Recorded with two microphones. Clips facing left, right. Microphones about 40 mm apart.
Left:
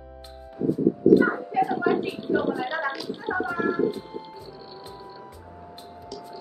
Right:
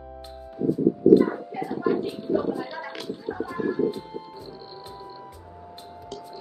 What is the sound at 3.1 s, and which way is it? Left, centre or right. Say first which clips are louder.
Music: left 4 dB; left.